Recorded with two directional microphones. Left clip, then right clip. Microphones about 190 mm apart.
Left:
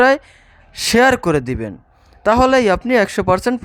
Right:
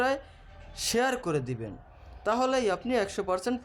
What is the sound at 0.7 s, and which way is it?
Speech, 45° left (ahead or behind).